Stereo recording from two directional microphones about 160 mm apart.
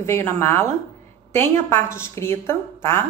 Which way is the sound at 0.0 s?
15° left (ahead or behind).